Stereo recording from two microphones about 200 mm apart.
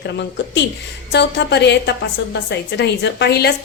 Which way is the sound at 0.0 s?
60° left (ahead or behind).